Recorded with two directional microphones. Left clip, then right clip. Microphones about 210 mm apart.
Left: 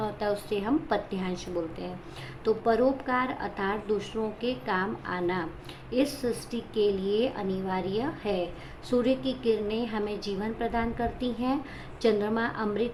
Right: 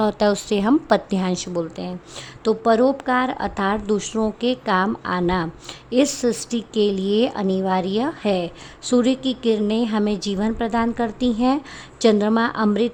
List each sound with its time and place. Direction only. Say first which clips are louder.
0.0 s a woman's voice: right 11 dB; 50° right (ahead or behind)